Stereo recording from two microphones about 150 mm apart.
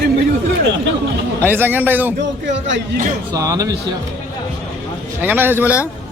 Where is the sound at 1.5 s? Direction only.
15° right (ahead or behind).